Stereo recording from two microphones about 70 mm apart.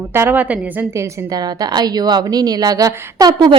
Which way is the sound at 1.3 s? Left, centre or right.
Right.